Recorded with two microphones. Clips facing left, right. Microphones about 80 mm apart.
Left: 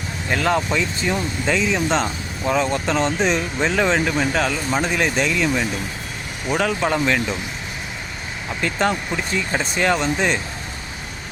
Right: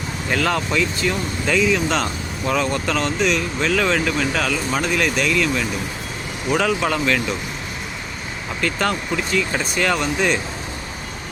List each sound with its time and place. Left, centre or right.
0.3 s speech: centre
2.5 s speech: centre
3.2 s speech: left; by 7.2 s centre
8.6 s speech: centre